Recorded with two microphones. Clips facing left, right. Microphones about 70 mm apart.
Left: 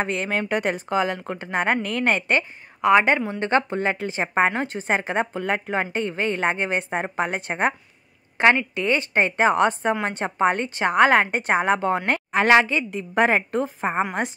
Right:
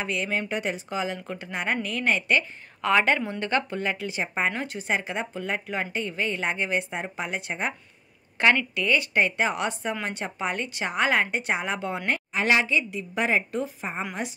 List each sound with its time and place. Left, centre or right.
0.0 s a woman's voice: left
2.8 s a woman's voice: centre
3.3 s a woman's voice: left
8.4 s a woman's voice: left